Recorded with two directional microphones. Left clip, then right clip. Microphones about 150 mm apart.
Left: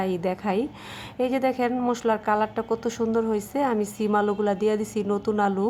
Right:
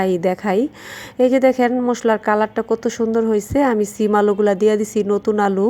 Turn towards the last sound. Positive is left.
turn(degrees=-30)  # may be behind; listen again after turning